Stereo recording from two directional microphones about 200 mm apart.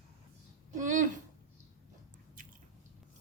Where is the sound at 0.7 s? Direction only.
40° right (ahead or behind).